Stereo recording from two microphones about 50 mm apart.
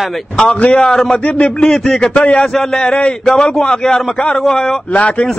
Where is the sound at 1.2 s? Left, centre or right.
Left.